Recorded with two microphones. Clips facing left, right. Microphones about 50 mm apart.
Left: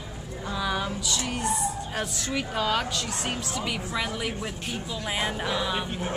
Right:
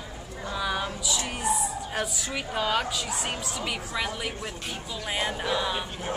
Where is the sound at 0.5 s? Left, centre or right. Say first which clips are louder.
Left 1 dB; centre.